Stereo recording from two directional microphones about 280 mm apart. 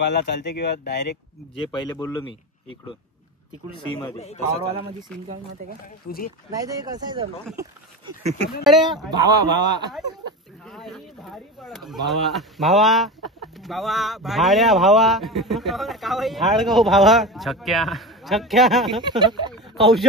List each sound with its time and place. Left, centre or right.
0.0 s speech: left
1.7 s speech: centre
6.0 s speech: left
6.5 s a man's voice: centre
8.6 s speech: centre
9.1 s a man's voice: centre
10.6 s speech: centre
18.9 s a man's voice: centre
19.5 s a sound: centre